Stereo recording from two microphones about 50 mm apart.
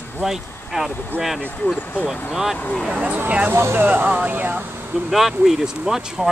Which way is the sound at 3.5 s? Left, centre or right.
Right.